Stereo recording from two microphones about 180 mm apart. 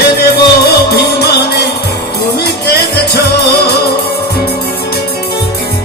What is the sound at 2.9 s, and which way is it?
Music, 65° left (ahead or behind).